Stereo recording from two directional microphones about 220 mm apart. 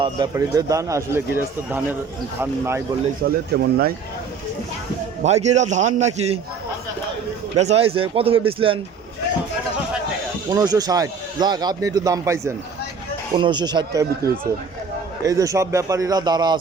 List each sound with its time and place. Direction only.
0.0 s a man's voice: 15° right (ahead or behind)
3.2 s speech: 40° right (ahead or behind)
5.2 s a man's voice: 30° right (ahead or behind)
7.5 s speech: 30° right (ahead or behind)
10.5 s a man's voice: 20° right (ahead or behind)
15.2 s a man's voice: 15° right (ahead or behind)